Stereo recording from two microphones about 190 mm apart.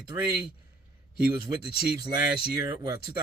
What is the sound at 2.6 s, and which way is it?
Speech, 20° right (ahead or behind).